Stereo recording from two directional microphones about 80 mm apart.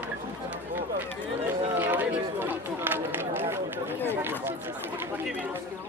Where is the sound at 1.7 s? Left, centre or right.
Right.